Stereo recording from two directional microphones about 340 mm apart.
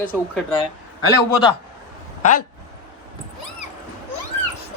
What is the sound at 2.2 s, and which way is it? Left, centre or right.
Speech, left.